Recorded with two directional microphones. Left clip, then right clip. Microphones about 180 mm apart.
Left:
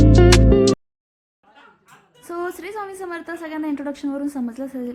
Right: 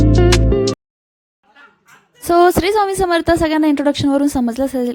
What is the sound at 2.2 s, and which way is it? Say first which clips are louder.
A woman's voice: right 17 dB; 50° right (ahead or behind).